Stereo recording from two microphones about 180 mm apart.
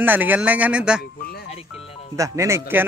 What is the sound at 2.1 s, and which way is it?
Speech, 15° right (ahead or behind).